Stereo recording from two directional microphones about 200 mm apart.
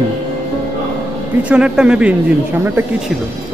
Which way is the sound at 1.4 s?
5° right (ahead or behind).